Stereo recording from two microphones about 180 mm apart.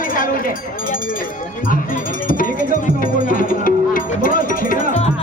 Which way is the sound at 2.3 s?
50° left (ahead or behind).